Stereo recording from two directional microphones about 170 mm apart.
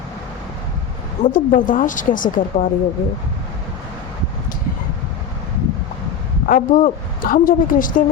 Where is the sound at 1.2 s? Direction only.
55° left (ahead or behind).